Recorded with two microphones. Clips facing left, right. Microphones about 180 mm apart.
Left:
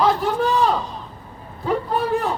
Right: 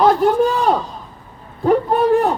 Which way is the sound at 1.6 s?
55° right (ahead or behind).